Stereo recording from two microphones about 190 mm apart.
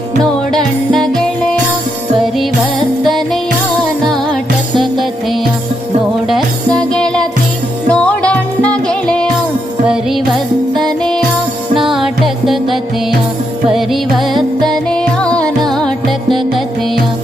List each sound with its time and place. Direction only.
0.2 s music: centre (ahead or behind)
4.8 s music: centre (ahead or behind)